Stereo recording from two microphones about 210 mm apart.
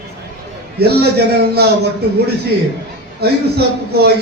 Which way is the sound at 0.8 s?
50° right (ahead or behind).